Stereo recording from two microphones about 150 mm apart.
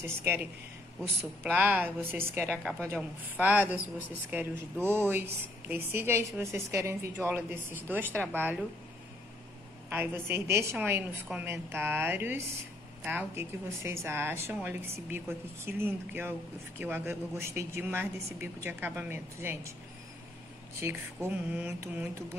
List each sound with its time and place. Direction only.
1.0 s a woman's voice: 10° right (ahead or behind)
9.8 s a woman's voice: 15° right (ahead or behind)
20.8 s a woman's voice: 15° right (ahead or behind)